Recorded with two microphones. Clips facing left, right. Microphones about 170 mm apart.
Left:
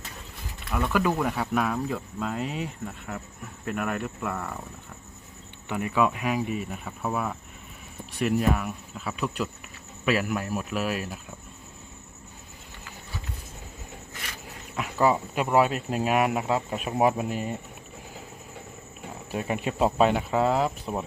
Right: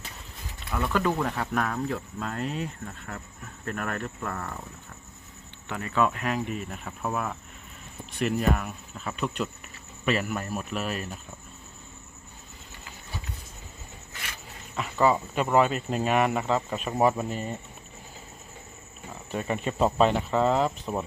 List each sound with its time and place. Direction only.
0.7 s speech: 10° left (ahead or behind)
3.7 s speech: 5° left (ahead or behind)
5.6 s speech: 15° left (ahead or behind)
14.8 s speech: 5° left (ahead or behind)
19.3 s speech: 10° left (ahead or behind)